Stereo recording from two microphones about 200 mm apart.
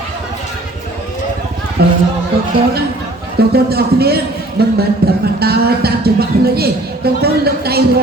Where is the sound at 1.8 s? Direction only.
50° right (ahead or behind).